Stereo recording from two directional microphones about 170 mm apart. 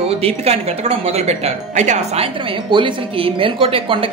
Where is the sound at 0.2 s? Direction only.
35° right (ahead or behind).